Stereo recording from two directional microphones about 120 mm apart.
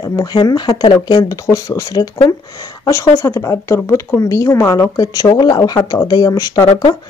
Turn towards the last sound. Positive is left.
turn(degrees=30)  # may be behind; listen again after turning